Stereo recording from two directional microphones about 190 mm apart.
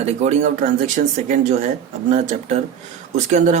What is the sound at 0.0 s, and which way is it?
Speech, 40° right (ahead or behind).